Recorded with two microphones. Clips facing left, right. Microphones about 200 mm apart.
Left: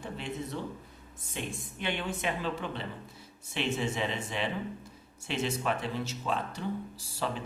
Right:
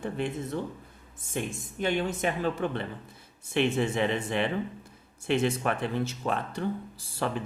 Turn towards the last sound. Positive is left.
turn(degrees=-55)  # may be behind; listen again after turning